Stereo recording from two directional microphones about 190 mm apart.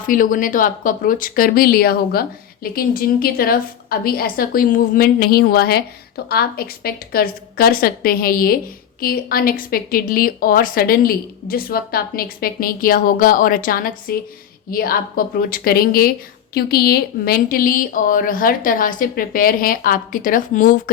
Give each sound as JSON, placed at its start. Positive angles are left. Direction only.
{"t": 0.1, "sound": "a woman's voice", "side_deg": 45}